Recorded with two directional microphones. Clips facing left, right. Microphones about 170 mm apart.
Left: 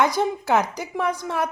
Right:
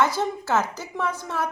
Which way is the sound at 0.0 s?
15° left (ahead or behind).